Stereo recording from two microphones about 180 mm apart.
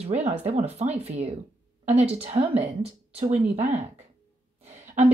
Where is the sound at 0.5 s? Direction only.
35° right (ahead or behind).